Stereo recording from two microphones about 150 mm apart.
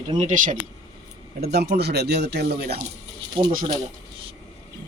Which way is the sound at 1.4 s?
90° right.